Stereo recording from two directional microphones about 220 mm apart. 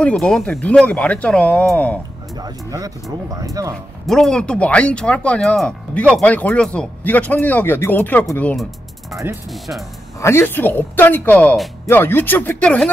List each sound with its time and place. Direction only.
0.0 s speech: 5° left (ahead or behind)
2.3 s speech: 15° right (ahead or behind)
4.0 s speech: centre (ahead or behind)
10.2 s a woman's voice: 10° left (ahead or behind)